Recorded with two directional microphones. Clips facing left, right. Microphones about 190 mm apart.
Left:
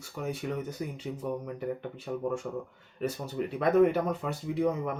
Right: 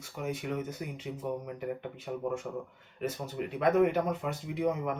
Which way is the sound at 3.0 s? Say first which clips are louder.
Left 2 dB; 35° left (ahead or behind).